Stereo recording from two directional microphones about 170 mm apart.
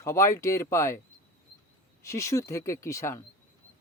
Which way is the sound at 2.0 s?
15° left (ahead or behind).